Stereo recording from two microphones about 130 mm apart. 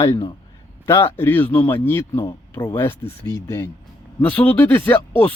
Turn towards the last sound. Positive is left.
turn(degrees=15)  # may be behind; listen again after turning